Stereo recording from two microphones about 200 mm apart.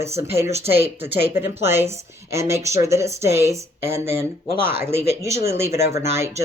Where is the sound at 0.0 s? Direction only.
15° right (ahead or behind).